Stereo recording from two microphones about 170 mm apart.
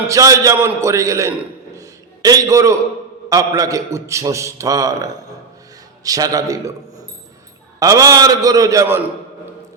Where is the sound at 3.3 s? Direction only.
20° right (ahead or behind).